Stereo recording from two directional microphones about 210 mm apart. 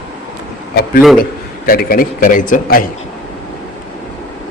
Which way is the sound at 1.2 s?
45° left (ahead or behind).